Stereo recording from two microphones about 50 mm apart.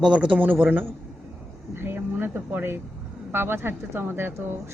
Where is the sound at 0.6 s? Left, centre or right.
Right.